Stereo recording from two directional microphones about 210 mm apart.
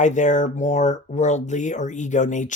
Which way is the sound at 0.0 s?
35° left (ahead or behind).